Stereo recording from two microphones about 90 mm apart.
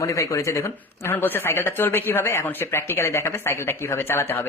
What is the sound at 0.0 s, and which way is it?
Speech, 35° left (ahead or behind).